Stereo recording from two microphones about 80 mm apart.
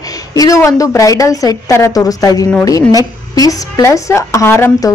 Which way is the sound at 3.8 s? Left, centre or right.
Left.